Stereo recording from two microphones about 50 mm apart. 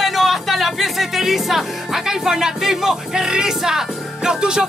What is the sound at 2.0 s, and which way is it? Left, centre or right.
Speech, centre.